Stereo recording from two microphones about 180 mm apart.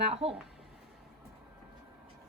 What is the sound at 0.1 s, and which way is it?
Speech, 35° right (ahead or behind).